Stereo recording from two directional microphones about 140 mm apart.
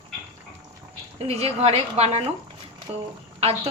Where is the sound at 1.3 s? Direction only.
45° right (ahead or behind).